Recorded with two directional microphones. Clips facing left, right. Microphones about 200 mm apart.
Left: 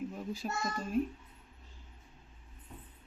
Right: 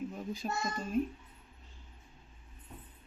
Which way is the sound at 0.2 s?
5° left (ahead or behind).